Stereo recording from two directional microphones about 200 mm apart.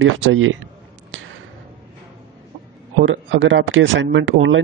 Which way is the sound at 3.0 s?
75° right (ahead or behind).